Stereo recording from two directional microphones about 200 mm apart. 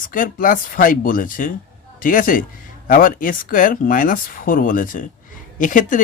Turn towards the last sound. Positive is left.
turn(degrees=40)  # may be behind; listen again after turning